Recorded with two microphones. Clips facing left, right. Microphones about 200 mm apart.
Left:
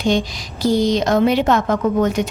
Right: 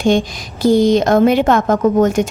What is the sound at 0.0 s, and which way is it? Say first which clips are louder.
A woman's voice: right 4 dB; 50° right (ahead or behind).